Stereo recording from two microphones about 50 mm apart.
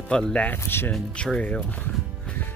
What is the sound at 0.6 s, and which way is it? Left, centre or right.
Speech, left.